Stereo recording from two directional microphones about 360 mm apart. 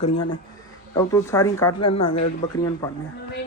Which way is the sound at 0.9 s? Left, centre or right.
Centre.